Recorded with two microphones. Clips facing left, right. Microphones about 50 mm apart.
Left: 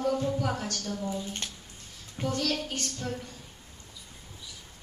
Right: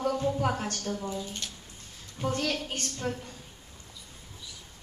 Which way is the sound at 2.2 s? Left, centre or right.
Right.